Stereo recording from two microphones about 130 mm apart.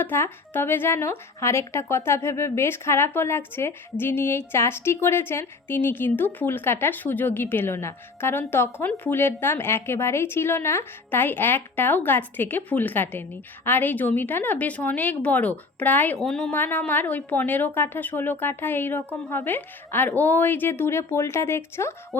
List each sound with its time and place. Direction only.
0.0 s speech: 15° left (ahead or behind)
16.2 s speech: 5° left (ahead or behind)
16.5 s speech: 15° left (ahead or behind)